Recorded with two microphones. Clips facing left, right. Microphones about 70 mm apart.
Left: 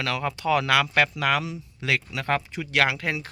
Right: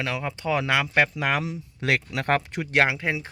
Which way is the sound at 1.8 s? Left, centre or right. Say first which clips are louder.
Right 2 dB; right.